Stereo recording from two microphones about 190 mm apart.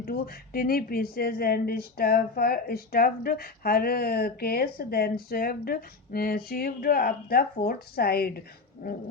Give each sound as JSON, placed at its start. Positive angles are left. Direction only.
{"t": 0.0, "sound": "a woman's voice", "side_deg": 50}